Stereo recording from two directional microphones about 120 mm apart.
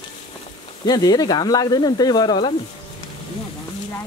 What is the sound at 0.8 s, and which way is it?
Speech, 35° left (ahead or behind).